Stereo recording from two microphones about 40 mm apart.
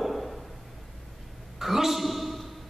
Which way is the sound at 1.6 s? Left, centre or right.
Centre.